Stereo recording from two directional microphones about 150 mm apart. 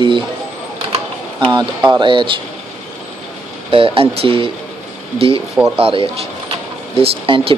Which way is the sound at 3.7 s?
35° right (ahead or behind).